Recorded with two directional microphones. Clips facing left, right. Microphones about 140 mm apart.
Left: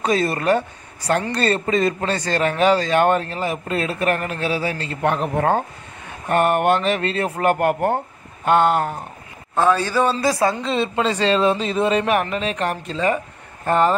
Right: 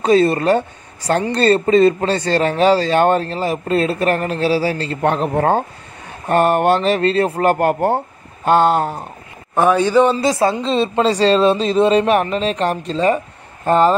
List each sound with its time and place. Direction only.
0.0 s a man's voice: 30° right (ahead or behind)
9.6 s a man's voice: 15° right (ahead or behind)